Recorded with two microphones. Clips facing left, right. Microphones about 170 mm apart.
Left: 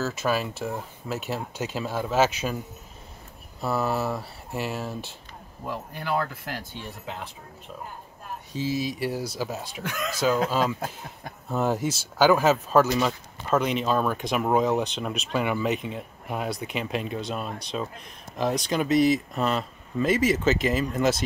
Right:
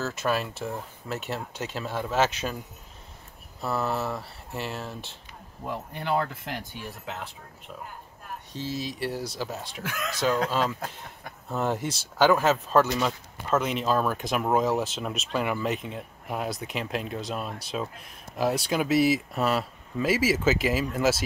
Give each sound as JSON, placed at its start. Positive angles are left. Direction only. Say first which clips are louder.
{"t": 0.0, "sound": "speech", "louder": "left 2 dB", "side_deg": 0}
{"t": 3.6, "sound": "speech", "louder": "left 2 dB", "side_deg": 5}
{"t": 5.7, "sound": "speech", "louder": "even", "side_deg": -25}
{"t": 8.5, "sound": "speech", "louder": "left 5 dB", "side_deg": 10}